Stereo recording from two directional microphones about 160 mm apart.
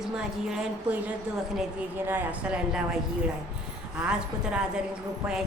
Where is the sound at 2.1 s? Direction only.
10° right (ahead or behind).